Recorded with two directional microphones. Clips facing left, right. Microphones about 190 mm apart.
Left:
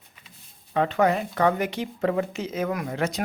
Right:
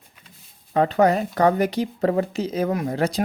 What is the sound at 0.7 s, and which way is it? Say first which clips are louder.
Speech: right 4 dB; 40° right (ahead or behind).